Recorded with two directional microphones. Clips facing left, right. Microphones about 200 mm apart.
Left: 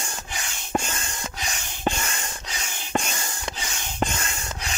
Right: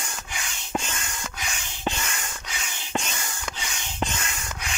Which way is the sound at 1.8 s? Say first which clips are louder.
Left 3 dB; 45° left (ahead or behind).